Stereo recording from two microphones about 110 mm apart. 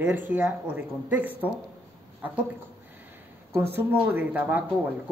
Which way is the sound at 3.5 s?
20° right (ahead or behind).